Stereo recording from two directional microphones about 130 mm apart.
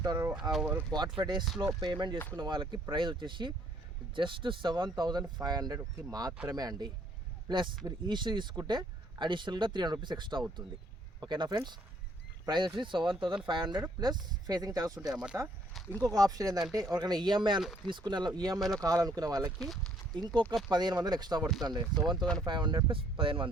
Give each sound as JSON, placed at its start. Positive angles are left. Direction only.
{"t": 0.0, "sound": "a sound", "side_deg": -30}
{"t": 0.5, "sound": "speech", "side_deg": -10}
{"t": 0.9, "sound": "speech", "side_deg": -35}
{"t": 15.1, "sound": "speech", "side_deg": -5}
{"t": 16.0, "sound": "speech", "side_deg": -25}
{"t": 19.5, "sound": "speech", "side_deg": 0}
{"t": 20.1, "sound": "speech", "side_deg": -35}